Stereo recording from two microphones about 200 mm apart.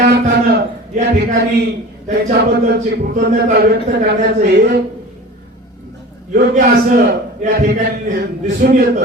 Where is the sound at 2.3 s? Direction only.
55° right (ahead or behind).